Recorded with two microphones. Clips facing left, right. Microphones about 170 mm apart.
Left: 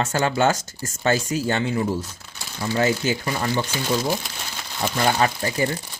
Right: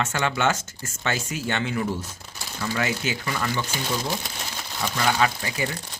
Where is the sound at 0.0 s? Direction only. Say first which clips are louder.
Left 4 dB; 35° left (ahead or behind).